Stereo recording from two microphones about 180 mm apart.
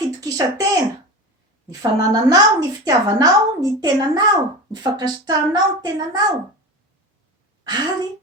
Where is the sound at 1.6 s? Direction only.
20° right (ahead or behind).